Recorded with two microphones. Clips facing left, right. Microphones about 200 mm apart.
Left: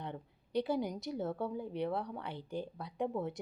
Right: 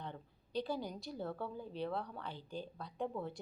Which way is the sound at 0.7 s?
20° left (ahead or behind).